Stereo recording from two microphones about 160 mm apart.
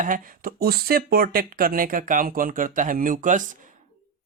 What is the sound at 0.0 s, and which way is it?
Speech, 60° right (ahead or behind).